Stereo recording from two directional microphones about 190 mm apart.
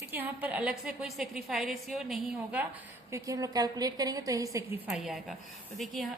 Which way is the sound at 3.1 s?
15° right (ahead or behind).